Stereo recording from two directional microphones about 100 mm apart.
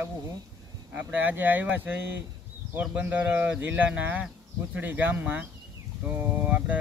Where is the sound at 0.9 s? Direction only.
20° right (ahead or behind).